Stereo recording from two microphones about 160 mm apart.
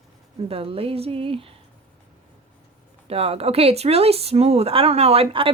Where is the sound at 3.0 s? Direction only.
40° right (ahead or behind).